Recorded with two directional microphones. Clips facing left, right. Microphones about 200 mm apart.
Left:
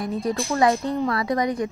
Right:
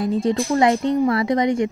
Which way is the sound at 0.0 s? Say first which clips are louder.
Right 5 dB; 25° right (ahead or behind).